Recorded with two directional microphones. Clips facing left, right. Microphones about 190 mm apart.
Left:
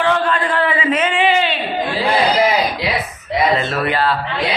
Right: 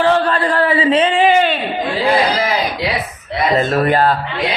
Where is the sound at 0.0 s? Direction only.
35° right (ahead or behind).